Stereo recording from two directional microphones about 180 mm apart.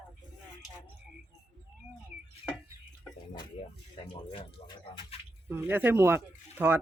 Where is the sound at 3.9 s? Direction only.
30° left (ahead or behind).